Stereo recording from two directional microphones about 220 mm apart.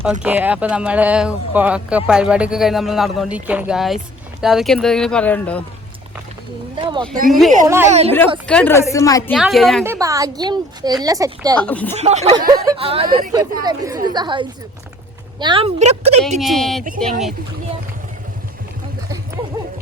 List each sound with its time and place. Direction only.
0.0 s speech: 5° right (ahead or behind)
6.7 s speech: 20° right (ahead or behind)
7.3 s speech: centre (ahead or behind)
7.9 s speech: 30° right (ahead or behind)
8.4 s a woman's voice: 5° left (ahead or behind)
9.3 s speech: centre (ahead or behind)
9.8 s a woman's voice: 10° right (ahead or behind)
11.6 s a woman's voice: 5° left (ahead or behind)
11.9 s speech: 30° right (ahead or behind)
12.3 s speech: 20° right (ahead or behind)
16.4 s speech: centre (ahead or behind)